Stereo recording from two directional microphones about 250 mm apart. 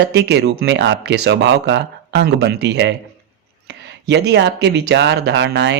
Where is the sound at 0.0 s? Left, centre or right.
Right.